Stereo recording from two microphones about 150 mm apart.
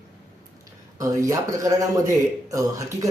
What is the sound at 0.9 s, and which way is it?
A man's voice, 20° right (ahead or behind).